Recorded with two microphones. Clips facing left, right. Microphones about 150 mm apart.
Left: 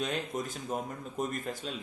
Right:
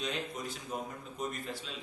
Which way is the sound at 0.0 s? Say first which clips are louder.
Left 4 dB; 50° left (ahead or behind).